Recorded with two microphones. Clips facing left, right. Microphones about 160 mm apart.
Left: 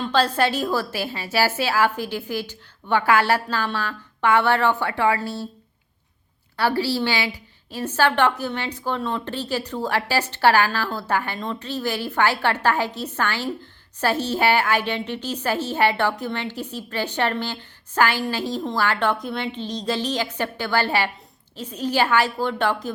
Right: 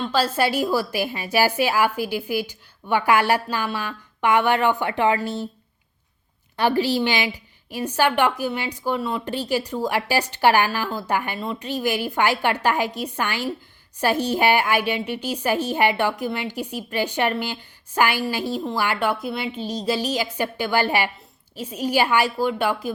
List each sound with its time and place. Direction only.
0.0 s a woman's voice: 5° right (ahead or behind)
6.6 s a woman's voice: 20° right (ahead or behind)